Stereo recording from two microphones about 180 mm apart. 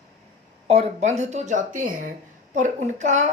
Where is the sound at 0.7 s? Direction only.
35° right (ahead or behind).